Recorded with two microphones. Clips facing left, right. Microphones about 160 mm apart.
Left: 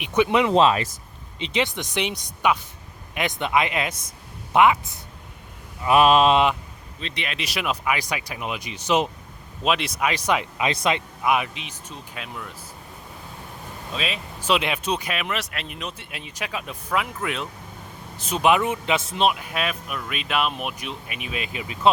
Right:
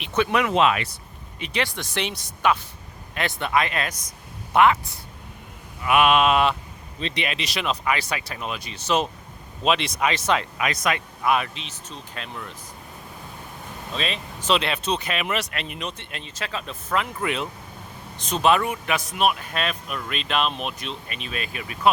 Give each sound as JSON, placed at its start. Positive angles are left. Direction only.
{"t": 0.0, "sound": "speech", "side_deg": 15}
{"t": 0.5, "sound": "mantra", "side_deg": 30}
{"t": 1.4, "sound": "speech", "side_deg": 20}
{"t": 5.8, "sound": "mantra", "side_deg": 35}
{"t": 7.0, "sound": "speech", "side_deg": -20}
{"t": 7.3, "sound": "speech", "side_deg": 5}
{"t": 9.6, "sound": "speech", "side_deg": 5}
{"t": 10.7, "sound": "speech", "side_deg": 25}
{"t": 11.2, "sound": "speech", "side_deg": 15}
{"t": 13.9, "sound": "speech", "side_deg": 5}
{"t": 15.2, "sound": "speech", "side_deg": 0}
{"t": 19.4, "sound": "speech", "side_deg": 10}